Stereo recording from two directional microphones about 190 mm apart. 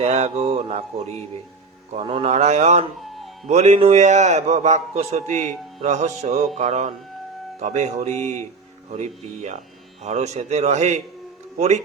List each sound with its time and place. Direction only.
0.0 s a man's voice: 35° right (ahead or behind)